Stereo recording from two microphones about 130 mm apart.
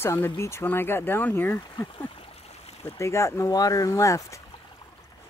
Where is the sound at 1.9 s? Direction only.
45° left (ahead or behind).